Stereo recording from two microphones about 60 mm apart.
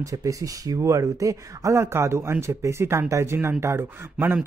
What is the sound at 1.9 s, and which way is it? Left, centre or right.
Speech, right.